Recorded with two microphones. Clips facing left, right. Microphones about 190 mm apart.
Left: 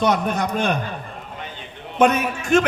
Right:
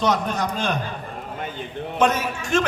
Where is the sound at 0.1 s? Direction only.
55° left (ahead or behind).